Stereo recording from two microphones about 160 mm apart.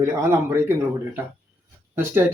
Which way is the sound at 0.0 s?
15° right (ahead or behind).